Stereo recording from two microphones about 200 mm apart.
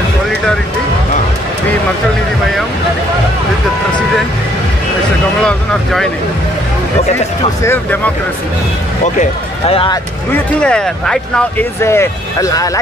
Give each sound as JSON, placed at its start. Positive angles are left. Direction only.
{"t": 5.4, "sound": "speech", "side_deg": 5}
{"t": 7.6, "sound": "speech", "side_deg": 10}
{"t": 9.0, "sound": "speech", "side_deg": 35}
{"t": 10.3, "sound": "speech", "side_deg": 5}